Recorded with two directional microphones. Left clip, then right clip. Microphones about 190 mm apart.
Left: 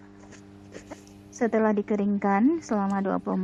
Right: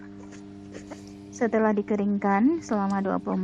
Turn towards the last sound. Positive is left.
turn(degrees=0)  # may be behind; listen again after turning